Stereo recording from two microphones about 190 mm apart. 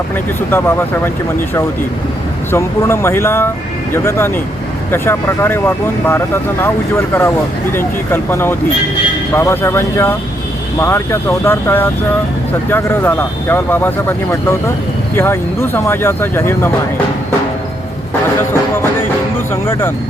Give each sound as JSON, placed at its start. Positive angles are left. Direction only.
{"t": 0.5, "sound": "speech", "side_deg": 10}
{"t": 2.5, "sound": "speech", "side_deg": 15}
{"t": 19.6, "sound": "speech", "side_deg": 10}